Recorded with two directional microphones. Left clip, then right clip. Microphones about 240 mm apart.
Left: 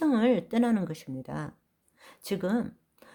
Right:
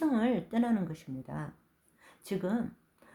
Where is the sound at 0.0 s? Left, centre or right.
Left.